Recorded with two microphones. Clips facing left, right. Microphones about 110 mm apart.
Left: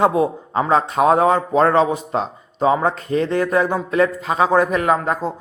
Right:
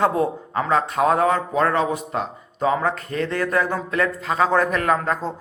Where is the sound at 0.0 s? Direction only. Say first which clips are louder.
Left 3 dB; 15° left (ahead or behind).